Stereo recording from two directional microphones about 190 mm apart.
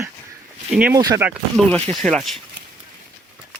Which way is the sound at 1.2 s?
5° right (ahead or behind).